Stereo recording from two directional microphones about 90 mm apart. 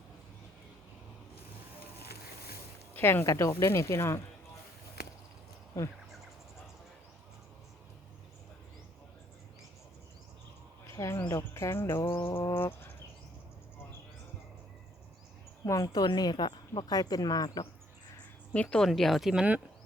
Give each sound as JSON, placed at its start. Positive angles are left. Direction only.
{"t": 2.9, "sound": "speech", "side_deg": 20}
{"t": 3.2, "sound": "speech", "side_deg": 35}
{"t": 5.7, "sound": "speech", "side_deg": 35}
{"t": 10.9, "sound": "a sound", "side_deg": 35}
{"t": 11.3, "sound": "music", "side_deg": 30}
{"t": 12.2, "sound": "a sound", "side_deg": 40}
{"t": 12.5, "sound": "a sound", "side_deg": 25}
{"t": 15.6, "sound": "speech", "side_deg": 35}
{"t": 15.9, "sound": "speech", "side_deg": 50}
{"t": 18.5, "sound": "a woman's voice", "side_deg": 15}
{"t": 18.9, "sound": "speech", "side_deg": 0}